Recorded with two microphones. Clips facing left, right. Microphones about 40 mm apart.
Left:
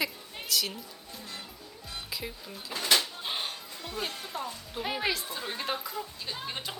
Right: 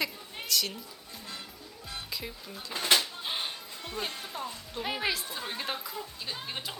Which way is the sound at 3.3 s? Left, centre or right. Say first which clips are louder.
Even; centre.